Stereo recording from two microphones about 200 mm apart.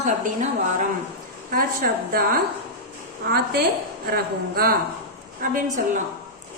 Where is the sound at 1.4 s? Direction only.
45° right (ahead or behind).